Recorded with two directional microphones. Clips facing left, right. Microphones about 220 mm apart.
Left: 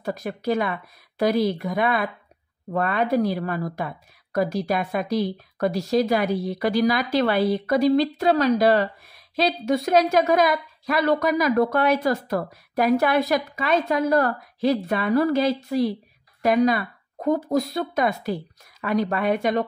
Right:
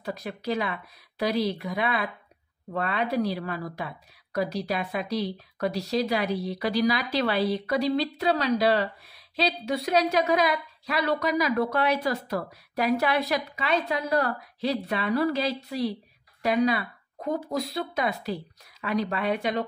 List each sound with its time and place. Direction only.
0.0 s a woman's voice: 45° left (ahead or behind)